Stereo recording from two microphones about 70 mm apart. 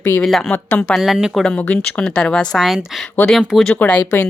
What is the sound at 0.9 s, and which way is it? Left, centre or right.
Speech, centre.